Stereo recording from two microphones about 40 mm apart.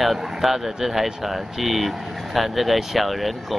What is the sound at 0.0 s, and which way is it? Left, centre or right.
Speech, centre.